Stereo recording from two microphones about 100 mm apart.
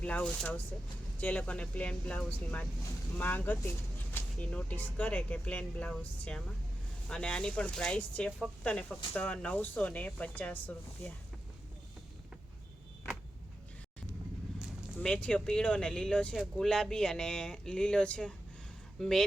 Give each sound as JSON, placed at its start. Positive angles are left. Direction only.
{"t": 0.0, "sound": "speech", "side_deg": 10}
{"t": 14.9, "sound": "speech", "side_deg": 10}